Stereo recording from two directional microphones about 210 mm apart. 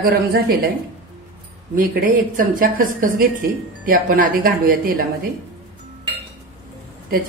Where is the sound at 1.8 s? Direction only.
40° right (ahead or behind).